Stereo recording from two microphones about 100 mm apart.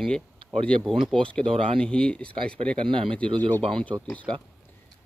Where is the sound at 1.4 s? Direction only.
65° right (ahead or behind).